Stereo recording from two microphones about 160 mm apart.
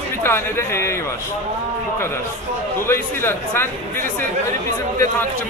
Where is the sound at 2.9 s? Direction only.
15° left (ahead or behind).